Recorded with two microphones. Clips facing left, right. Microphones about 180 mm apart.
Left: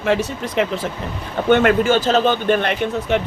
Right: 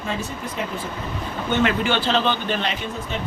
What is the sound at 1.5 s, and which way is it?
Speech, 50° left (ahead or behind).